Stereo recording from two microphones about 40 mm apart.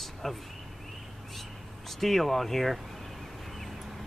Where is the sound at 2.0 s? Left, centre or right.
Centre.